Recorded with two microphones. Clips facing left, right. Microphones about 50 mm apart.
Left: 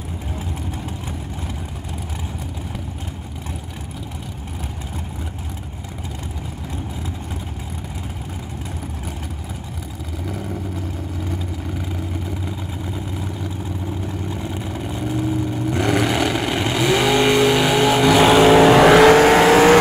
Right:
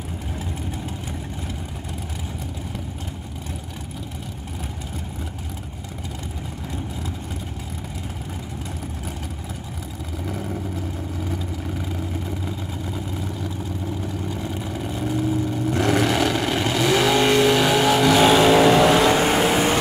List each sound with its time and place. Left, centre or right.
10.2 s vehicle: centre
12.9 s vehicle: centre
18.7 s vehicle: left